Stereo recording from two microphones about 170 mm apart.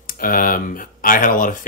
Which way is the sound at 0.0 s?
55° left (ahead or behind).